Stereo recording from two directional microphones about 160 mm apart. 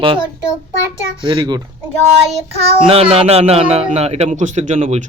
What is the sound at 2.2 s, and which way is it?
Child singing, 40° right (ahead or behind).